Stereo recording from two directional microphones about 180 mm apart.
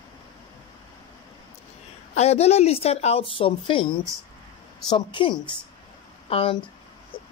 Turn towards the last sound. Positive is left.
turn(degrees=30)  # may be behind; listen again after turning